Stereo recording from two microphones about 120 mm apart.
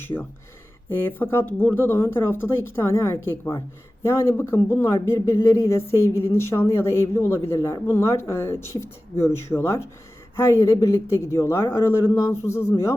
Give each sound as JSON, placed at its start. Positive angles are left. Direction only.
{"t": 0.9, "sound": "speech", "side_deg": 15}